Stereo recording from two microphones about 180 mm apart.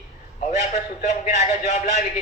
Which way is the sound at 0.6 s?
40° left (ahead or behind).